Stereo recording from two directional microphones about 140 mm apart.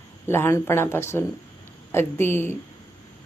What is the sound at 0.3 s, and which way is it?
Speech, 15° left (ahead or behind).